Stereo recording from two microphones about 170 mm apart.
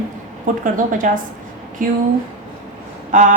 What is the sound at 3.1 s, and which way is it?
Speech, 50° right (ahead or behind).